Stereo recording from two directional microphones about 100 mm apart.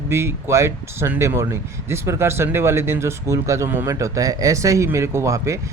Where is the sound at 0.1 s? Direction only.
25° right (ahead or behind).